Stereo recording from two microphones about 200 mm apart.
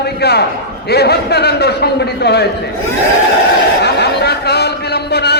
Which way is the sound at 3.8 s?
55° left (ahead or behind).